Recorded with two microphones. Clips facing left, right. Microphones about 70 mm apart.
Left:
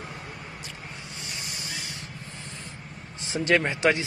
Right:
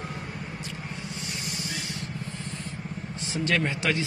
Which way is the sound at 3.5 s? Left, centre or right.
Left.